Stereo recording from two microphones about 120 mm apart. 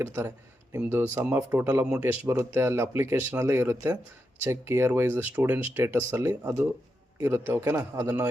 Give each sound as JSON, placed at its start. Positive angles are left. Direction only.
{"t": 0.0, "sound": "speech", "side_deg": -20}